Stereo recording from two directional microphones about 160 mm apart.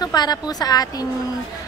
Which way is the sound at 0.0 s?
25° left (ahead or behind).